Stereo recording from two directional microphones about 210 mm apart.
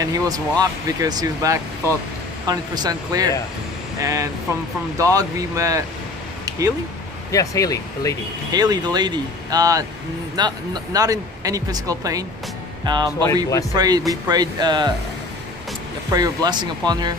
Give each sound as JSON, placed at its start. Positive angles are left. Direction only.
{"t": 0.0, "sound": "speech", "side_deg": -20}
{"t": 7.2, "sound": "speech", "side_deg": 15}
{"t": 8.5, "sound": "speech", "side_deg": -20}
{"t": 16.1, "sound": "speech", "side_deg": -20}